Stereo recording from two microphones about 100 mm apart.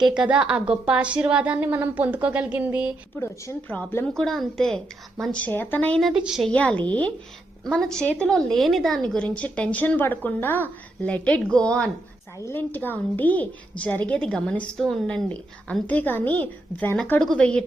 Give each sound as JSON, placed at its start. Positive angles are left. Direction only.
{"t": 0.0, "sound": "a woman's voice", "side_deg": -10}
{"t": 3.2, "sound": "a woman's voice", "side_deg": 20}
{"t": 5.4, "sound": "a woman's voice", "side_deg": 20}
{"t": 6.0, "sound": "a woman's voice", "side_deg": -5}
{"t": 6.4, "sound": "a woman's voice", "side_deg": 10}
{"t": 12.4, "sound": "a woman's voice", "side_deg": 25}
{"t": 17.2, "sound": "a woman's voice", "side_deg": 10}